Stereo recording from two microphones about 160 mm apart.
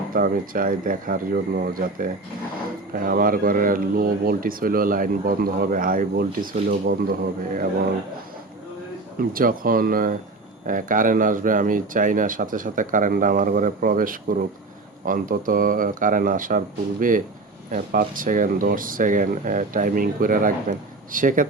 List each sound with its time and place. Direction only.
0.1 s speech: 60° right (ahead or behind)
9.3 s speech: 65° right (ahead or behind)